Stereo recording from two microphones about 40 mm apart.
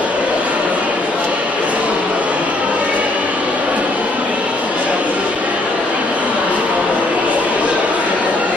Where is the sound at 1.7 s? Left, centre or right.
Right.